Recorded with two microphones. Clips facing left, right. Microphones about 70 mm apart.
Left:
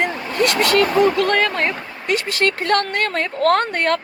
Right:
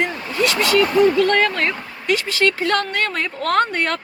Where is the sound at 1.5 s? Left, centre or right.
Left.